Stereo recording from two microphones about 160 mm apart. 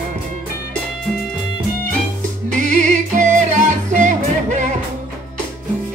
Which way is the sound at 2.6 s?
50° right (ahead or behind).